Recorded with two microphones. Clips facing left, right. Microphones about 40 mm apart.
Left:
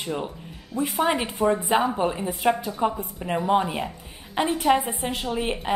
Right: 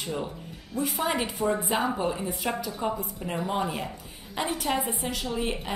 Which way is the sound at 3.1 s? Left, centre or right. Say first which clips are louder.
Left 7 dB; centre.